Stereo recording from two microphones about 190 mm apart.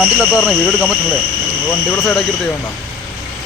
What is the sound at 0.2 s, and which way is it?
Speech, 5° right (ahead or behind).